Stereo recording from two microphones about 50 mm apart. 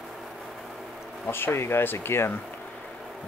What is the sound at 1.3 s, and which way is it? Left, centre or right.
Speech, left.